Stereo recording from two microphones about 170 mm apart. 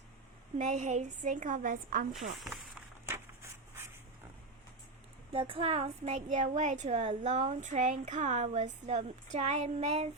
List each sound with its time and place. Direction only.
0.6 s a woman's voice: 45° right (ahead or behind)
2.1 s speech: centre (ahead or behind)
5.3 s a woman's voice: 30° right (ahead or behind)